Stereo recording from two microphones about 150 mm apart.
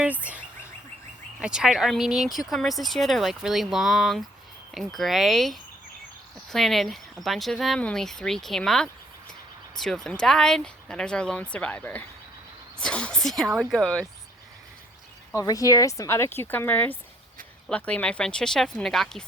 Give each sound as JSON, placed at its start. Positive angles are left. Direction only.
{"t": 0.0, "sound": "speech", "side_deg": -10}
{"t": 15.3, "sound": "speech", "side_deg": 20}